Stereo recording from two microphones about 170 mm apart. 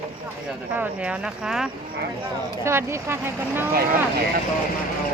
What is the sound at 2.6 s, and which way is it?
Speech, 15° right (ahead or behind).